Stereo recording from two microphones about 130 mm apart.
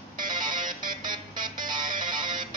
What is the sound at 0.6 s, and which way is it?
Music, 90° right.